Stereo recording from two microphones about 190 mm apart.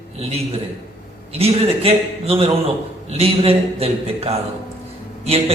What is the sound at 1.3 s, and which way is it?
A man's voice, 30° right (ahead or behind).